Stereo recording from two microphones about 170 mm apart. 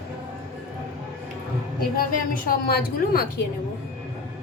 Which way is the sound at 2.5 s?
60° left (ahead or behind).